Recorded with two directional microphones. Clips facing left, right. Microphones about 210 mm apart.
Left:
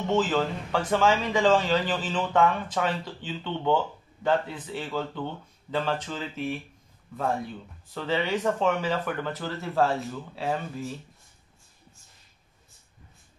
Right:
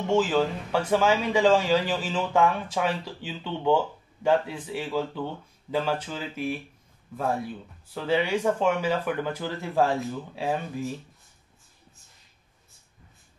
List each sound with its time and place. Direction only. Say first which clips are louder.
0.1 s speech: right 2 dB; 10° right (ahead or behind)
7.9 s speech: right 2 dB; 10° right (ahead or behind)